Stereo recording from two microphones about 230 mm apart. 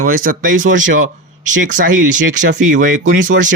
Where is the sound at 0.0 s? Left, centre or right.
Right.